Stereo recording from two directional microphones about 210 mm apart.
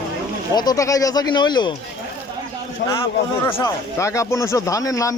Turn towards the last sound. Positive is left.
turn(degrees=15)  # may be behind; listen again after turning